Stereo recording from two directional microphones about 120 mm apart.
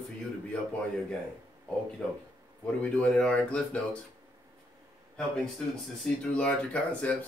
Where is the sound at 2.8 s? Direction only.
10° left (ahead or behind).